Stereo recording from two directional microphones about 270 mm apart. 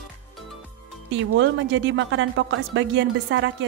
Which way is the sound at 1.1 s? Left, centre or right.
Right.